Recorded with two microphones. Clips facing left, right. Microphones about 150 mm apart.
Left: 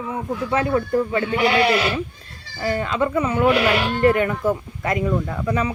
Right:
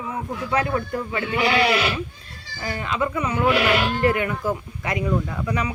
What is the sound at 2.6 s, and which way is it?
Speech, 35° left (ahead or behind).